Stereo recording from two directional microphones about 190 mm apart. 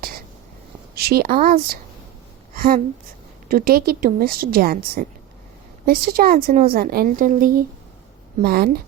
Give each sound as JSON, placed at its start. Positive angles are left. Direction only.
{"t": 0.9, "sound": "a woman's voice", "side_deg": -55}